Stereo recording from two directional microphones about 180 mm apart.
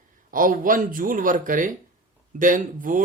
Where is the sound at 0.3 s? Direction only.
50° right (ahead or behind).